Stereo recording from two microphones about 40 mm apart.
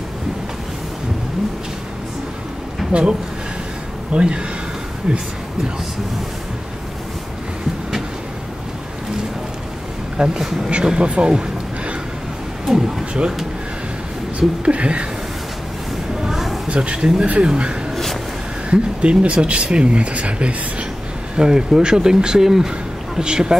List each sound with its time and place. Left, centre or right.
2.9 s speech: right
10.1 s speech: right
12.6 s speech: centre
14.6 s speech: right
16.2 s a sound: centre
16.6 s speech: right
21.4 s speech: centre